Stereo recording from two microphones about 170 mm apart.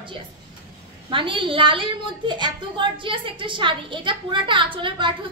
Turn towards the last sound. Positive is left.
turn(degrees=-30)  # may be behind; listen again after turning